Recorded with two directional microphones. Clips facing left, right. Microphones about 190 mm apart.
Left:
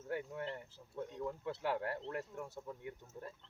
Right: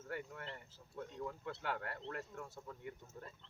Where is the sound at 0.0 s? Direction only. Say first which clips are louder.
Left 5 dB; 15° left (ahead or behind).